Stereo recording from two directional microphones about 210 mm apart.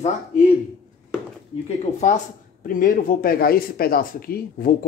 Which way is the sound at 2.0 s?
35° left (ahead or behind).